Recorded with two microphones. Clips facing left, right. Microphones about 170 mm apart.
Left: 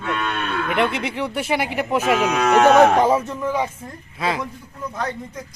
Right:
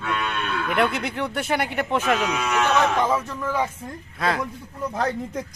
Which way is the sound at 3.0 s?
30° left (ahead or behind).